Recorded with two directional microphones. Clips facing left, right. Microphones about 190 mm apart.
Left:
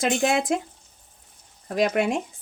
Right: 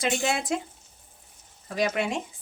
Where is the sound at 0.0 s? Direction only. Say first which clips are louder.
Left 5 dB; 55° left (ahead or behind).